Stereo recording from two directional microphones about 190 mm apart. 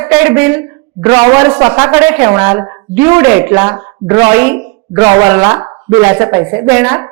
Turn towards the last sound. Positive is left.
turn(degrees=-15)  # may be behind; listen again after turning